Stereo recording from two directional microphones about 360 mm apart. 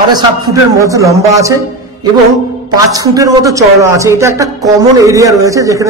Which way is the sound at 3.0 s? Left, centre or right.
Centre.